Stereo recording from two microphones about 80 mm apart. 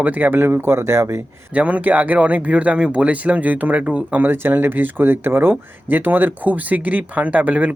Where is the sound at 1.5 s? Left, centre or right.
Centre.